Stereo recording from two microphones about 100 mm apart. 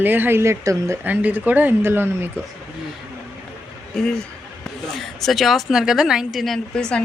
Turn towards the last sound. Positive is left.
turn(degrees=5)  # may be behind; listen again after turning